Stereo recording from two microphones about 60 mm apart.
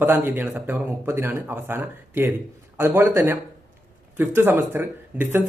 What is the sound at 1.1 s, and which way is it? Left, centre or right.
Speech, right.